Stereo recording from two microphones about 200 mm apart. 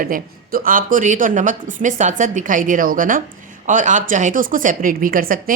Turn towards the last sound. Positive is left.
turn(degrees=-45)  # may be behind; listen again after turning